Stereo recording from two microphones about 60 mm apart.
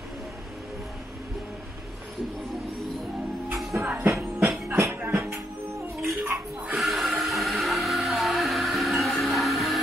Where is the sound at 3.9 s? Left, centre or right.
Right.